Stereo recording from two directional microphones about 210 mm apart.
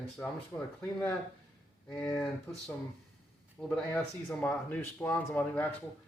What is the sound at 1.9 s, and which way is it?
Speech, 10° left (ahead or behind).